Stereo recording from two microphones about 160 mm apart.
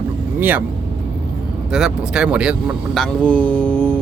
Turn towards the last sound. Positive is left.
turn(degrees=10)  # may be behind; listen again after turning